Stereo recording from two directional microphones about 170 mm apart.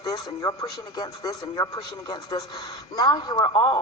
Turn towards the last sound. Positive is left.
turn(degrees=30)  # may be behind; listen again after turning